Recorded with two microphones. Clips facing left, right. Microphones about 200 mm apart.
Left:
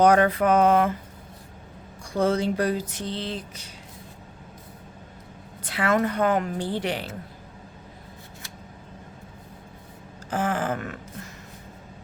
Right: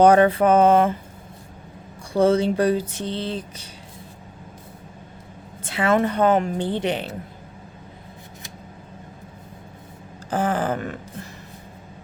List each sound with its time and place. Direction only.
0.0 s speech: 30° right (ahead or behind)
2.1 s speech: 30° right (ahead or behind)
5.6 s speech: 25° right (ahead or behind)
10.2 s a sound: 35° right (ahead or behind)